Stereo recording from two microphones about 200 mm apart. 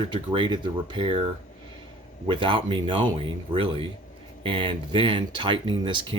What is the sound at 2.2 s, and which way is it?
Speech, 25° right (ahead or behind).